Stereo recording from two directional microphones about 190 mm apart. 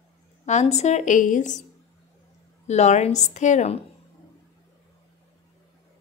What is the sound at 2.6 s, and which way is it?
A woman's voice, 35° left (ahead or behind).